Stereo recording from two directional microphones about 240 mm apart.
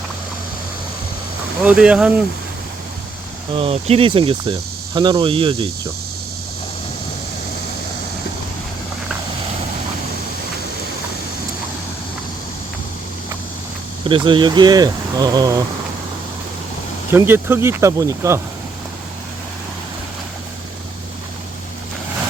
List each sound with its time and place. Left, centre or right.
1.6 s speech: centre
3.5 s speech: right
14.0 s speech: right
17.1 s speech: centre